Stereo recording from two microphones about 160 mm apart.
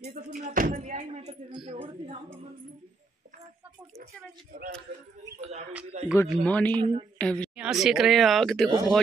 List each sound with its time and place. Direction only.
0.0 s speech: 60° right (ahead or behind)
1.5 s speech: 35° right (ahead or behind)
6.1 s a man's voice: 10° left (ahead or behind)
6.7 s speech: 35° right (ahead or behind)
7.2 s a woman's voice: 5° left (ahead or behind)
7.5 s speech: 5° right (ahead or behind)
8.6 s speech: 20° right (ahead or behind)